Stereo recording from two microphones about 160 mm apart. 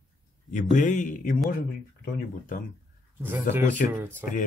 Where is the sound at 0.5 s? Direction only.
50° left (ahead or behind).